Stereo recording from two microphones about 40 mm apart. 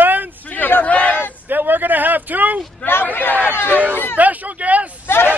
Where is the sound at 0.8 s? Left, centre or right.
Left.